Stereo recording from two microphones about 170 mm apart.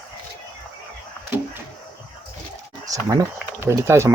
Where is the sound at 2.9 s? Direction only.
20° right (ahead or behind).